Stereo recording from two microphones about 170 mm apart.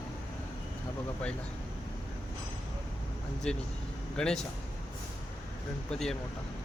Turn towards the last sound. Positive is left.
turn(degrees=5)  # may be behind; listen again after turning